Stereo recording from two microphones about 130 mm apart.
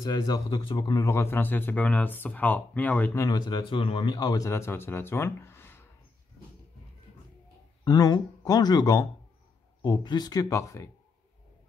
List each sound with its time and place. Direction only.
0.0 s speech: 35° left (ahead or behind); by 3.3 s 10° left (ahead or behind)
3.3 s speech: 35° left (ahead or behind); by 5.9 s 15° left (ahead or behind)
7.8 s speech: 30° left (ahead or behind)